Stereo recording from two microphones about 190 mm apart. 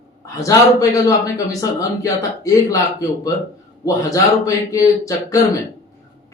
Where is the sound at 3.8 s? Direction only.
15° left (ahead or behind).